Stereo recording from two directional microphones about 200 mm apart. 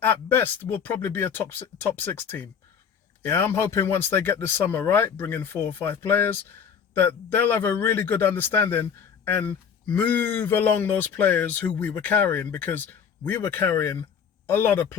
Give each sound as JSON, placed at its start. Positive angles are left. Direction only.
{"t": 0.0, "sound": "a man's voice", "side_deg": 10}